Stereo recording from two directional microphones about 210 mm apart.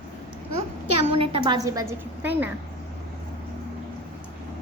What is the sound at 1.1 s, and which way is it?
A woman's voice, 25° right (ahead or behind).